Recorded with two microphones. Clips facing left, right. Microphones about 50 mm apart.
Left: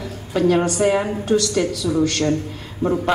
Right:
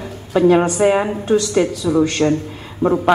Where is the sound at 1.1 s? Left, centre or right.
Right.